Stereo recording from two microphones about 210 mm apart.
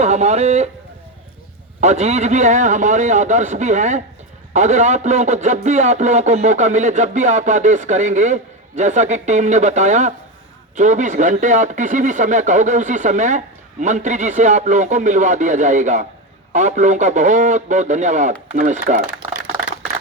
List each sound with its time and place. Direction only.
0.0 s speech: 30° right (ahead or behind)
1.8 s a man's voice: 30° right (ahead or behind)